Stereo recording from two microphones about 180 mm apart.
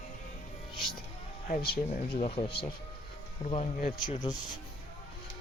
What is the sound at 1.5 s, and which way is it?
Speech, 60° left (ahead or behind).